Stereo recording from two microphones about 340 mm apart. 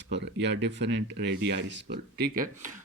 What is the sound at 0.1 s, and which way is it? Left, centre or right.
Speech, right.